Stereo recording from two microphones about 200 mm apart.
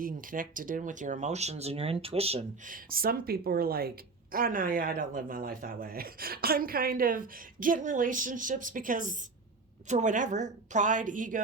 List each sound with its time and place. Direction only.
0.0 s speech: 45° right (ahead or behind)
2.7 s a woman's voice: 45° right (ahead or behind)